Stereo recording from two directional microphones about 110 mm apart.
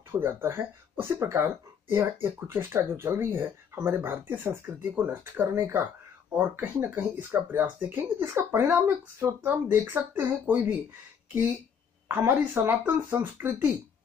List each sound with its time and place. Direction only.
0.2 s speech: 20° right (ahead or behind)
12.1 s speech: 20° right (ahead or behind)